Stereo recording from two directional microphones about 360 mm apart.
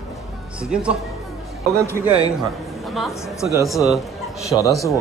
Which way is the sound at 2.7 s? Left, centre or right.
Centre.